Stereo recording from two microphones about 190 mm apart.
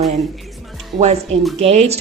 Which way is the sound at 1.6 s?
35° right (ahead or behind).